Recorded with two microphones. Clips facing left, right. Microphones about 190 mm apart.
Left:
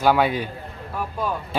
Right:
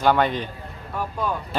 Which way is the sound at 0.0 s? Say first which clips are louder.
Left 1 dB; 5° left (ahead or behind).